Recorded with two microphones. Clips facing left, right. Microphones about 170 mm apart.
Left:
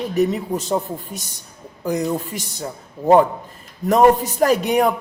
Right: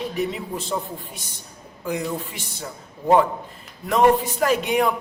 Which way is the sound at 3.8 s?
40° left (ahead or behind).